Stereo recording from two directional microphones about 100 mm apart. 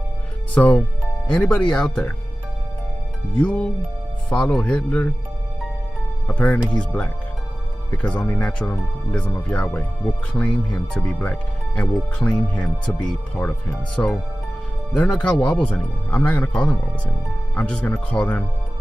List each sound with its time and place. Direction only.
0.6 s speech: 15° left (ahead or behind)
3.3 s speech: 15° left (ahead or behind)
6.2 s speech: 15° left (ahead or behind)
9.6 s speech: 15° left (ahead or behind)